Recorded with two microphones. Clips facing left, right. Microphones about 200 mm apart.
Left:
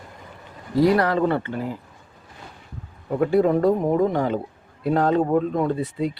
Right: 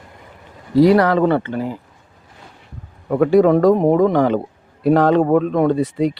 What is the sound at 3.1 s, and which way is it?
Speech, 85° right.